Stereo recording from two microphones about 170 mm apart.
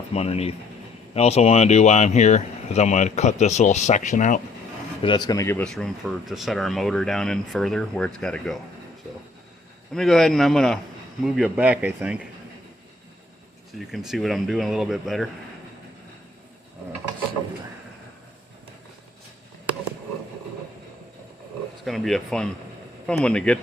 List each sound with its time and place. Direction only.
0.1 s speech: 35° left (ahead or behind)
5.0 s a man's voice: 25° left (ahead or behind)
5.6 s speech: centre (ahead or behind)
9.9 s speech: centre (ahead or behind)
13.7 s speech: centre (ahead or behind)
21.8 s speech: centre (ahead or behind)